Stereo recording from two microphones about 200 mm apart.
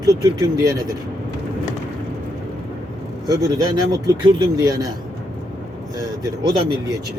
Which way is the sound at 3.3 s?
20° right (ahead or behind).